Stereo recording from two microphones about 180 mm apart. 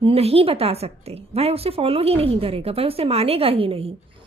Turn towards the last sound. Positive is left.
turn(degrees=-30)  # may be behind; listen again after turning